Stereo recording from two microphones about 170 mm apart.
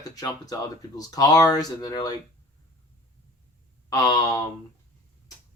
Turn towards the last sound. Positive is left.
turn(degrees=25)  # may be behind; listen again after turning